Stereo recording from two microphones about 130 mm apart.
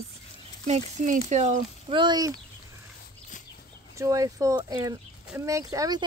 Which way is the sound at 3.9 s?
25° right (ahead or behind).